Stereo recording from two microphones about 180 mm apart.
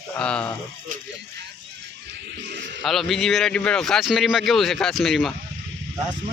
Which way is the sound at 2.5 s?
80° right.